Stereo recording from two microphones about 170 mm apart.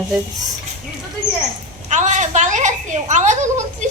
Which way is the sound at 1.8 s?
45° right (ahead or behind).